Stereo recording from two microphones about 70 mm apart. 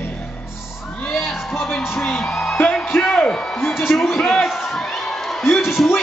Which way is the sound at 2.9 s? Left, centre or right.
Left.